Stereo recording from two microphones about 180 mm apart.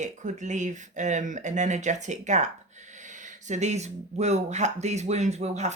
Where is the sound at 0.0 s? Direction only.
40° right (ahead or behind).